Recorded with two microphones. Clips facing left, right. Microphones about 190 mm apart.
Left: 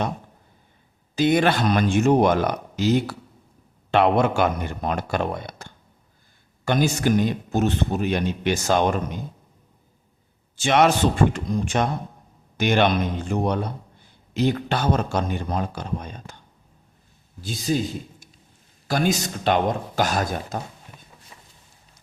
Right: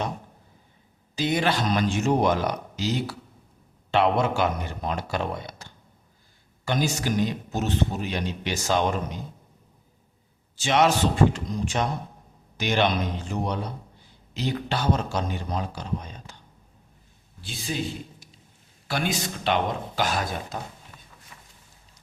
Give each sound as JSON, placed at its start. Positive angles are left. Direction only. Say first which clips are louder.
{"t": 1.1, "sound": "a man's voice", "louder": "left 5 dB", "side_deg": 55}
{"t": 10.6, "sound": "a man's voice", "louder": "left 3 dB", "side_deg": 55}
{"t": 17.4, "sound": "a man's voice", "louder": "left 8 dB", "side_deg": 40}
{"t": 18.9, "sound": "a man's voice", "louder": "left 5 dB", "side_deg": 40}
{"t": 21.3, "sound": "vehicle", "louder": "left 1 dB", "side_deg": 20}